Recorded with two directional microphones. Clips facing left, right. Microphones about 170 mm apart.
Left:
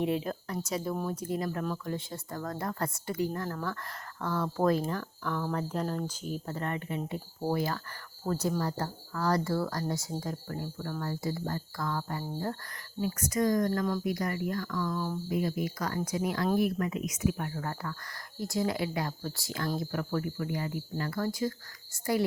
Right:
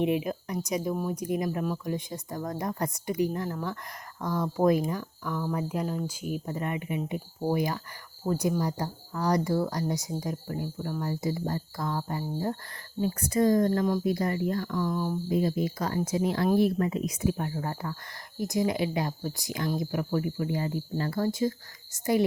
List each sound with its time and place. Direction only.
0.0 s speech: 15° right (ahead or behind)
13.0 s speech: 30° right (ahead or behind)